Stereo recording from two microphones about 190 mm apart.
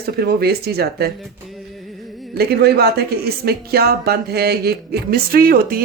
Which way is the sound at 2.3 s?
55° right (ahead or behind).